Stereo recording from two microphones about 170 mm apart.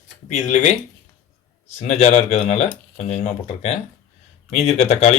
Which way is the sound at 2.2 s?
40° left (ahead or behind).